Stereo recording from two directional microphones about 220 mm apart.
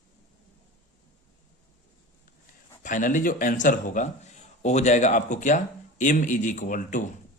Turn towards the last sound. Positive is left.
turn(degrees=35)  # may be behind; listen again after turning